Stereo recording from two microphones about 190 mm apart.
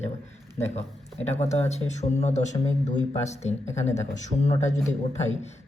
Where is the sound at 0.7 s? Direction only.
35° left (ahead or behind).